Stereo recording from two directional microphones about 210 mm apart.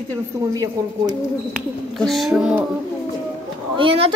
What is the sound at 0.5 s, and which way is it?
Speech, 20° right (ahead or behind).